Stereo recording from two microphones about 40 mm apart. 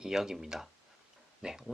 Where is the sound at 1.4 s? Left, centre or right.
Centre.